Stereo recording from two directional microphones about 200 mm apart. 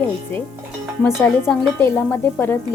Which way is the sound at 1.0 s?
10° left (ahead or behind).